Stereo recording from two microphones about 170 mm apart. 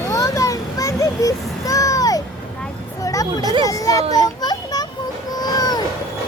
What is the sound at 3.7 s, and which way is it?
Speech, 20° left (ahead or behind).